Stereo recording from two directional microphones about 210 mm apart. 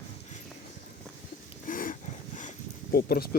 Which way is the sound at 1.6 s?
40° left (ahead or behind).